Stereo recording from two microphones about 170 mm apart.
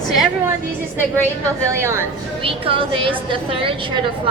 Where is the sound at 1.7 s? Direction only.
15° right (ahead or behind).